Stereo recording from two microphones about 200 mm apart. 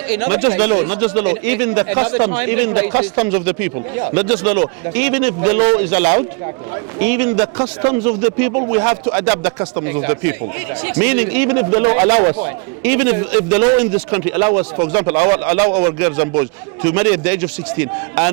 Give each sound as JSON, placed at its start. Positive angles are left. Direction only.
{"t": 0.2, "sound": "a man's voice", "side_deg": -20}
{"t": 2.9, "sound": "speech", "side_deg": -30}
{"t": 4.1, "sound": "a man's voice", "side_deg": -15}
{"t": 7.6, "sound": "a man's voice", "side_deg": -30}
{"t": 12.2, "sound": "a man's voice", "side_deg": -35}
{"t": 12.8, "sound": "a man's voice", "side_deg": -15}